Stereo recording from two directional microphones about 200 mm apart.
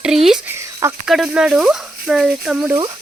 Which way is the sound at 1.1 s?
5° right (ahead or behind).